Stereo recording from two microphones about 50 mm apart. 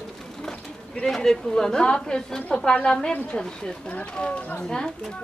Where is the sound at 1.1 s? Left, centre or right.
Centre.